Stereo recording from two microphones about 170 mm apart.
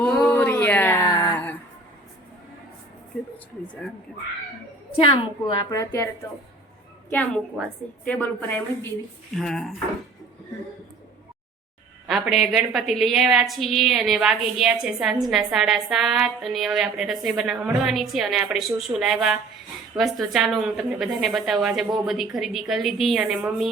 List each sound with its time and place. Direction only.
0.0 s a sound: 5° left (ahead or behind)
4.9 s a woman's voice: 30° left (ahead or behind)
7.1 s a woman's voice: 10° left (ahead or behind)
12.0 s a woman's voice: centre (ahead or behind)